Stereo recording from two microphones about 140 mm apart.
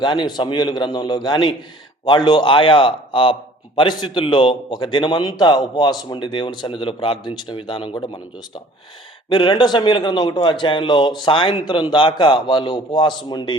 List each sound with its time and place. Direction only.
0.0 s a man's voice: 35° left (ahead or behind)